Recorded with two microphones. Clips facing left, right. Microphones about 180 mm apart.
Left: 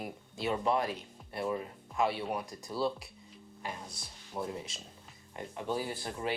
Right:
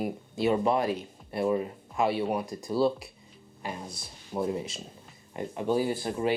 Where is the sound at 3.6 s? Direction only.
30° right (ahead or behind).